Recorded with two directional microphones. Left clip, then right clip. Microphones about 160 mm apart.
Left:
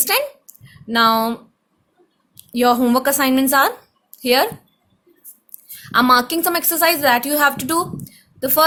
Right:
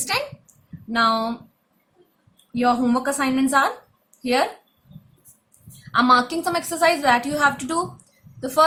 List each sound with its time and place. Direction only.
0.1 s a woman's voice: 55° left (ahead or behind)
2.6 s a woman's voice: 65° left (ahead or behind)
5.9 s a woman's voice: 55° left (ahead or behind)